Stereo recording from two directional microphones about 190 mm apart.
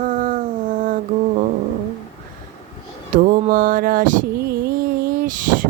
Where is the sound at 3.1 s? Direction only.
50° right (ahead or behind).